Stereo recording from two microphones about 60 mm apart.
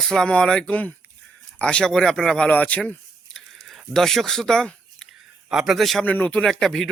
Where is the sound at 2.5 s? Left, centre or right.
Left.